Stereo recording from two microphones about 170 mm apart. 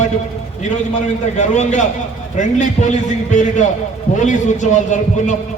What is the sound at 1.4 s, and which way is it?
A man's voice, 45° left (ahead or behind).